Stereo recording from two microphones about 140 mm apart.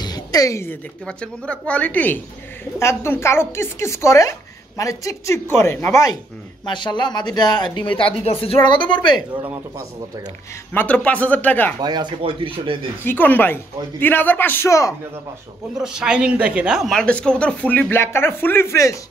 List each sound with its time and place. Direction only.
0.0 s a sound: 30° left (ahead or behind)
1.0 s speech: 5° left (ahead or behind)
6.6 s speech: 35° left (ahead or behind)
8.2 s a woman's voice: 45° left (ahead or behind)
8.6 s speech: 35° left (ahead or behind)
9.3 s speech: 15° right (ahead or behind)
10.7 s speech: 10° left (ahead or behind)
11.8 s speech: 30° right (ahead or behind)
13.0 s speech: 15° left (ahead or behind)
15.8 s speech: 5° right (ahead or behind); by 18.9 s 20° left (ahead or behind)